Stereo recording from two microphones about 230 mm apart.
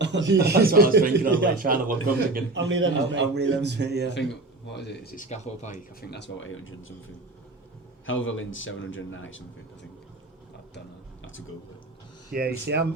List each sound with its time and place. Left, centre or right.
0.0 s a man's voice: right
4.6 s speech: left
6.1 s a man's voice: left
8.0 s a man's voice: left
11.2 s a sound: left
12.3 s a man's voice: right